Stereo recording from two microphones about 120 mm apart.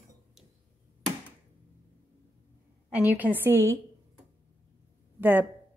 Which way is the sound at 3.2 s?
15° right (ahead or behind).